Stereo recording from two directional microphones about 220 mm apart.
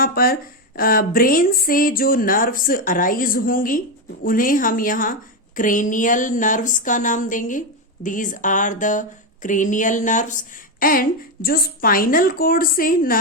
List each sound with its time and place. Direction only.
0.0 s speech: 40° left (ahead or behind)